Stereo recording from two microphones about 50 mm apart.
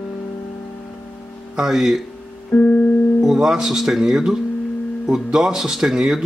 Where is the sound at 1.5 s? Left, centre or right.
Centre.